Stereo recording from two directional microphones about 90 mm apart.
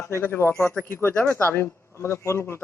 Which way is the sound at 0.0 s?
25° left (ahead or behind).